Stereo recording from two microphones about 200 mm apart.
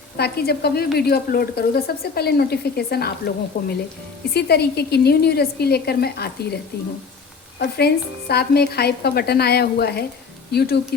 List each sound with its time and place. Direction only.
0.2 s speech: 55° left (ahead or behind)
7.6 s speech: 55° left (ahead or behind)